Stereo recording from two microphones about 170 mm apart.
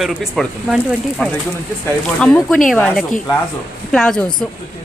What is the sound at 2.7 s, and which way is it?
Speech, 5° left (ahead or behind).